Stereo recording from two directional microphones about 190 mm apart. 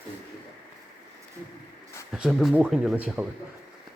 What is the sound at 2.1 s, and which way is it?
Speech, centre (ahead or behind).